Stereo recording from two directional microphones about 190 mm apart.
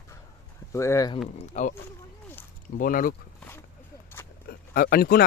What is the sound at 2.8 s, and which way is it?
Speech, 50° left (ahead or behind).